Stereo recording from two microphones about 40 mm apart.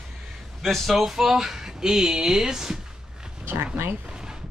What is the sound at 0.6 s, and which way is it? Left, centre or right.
Speech, centre.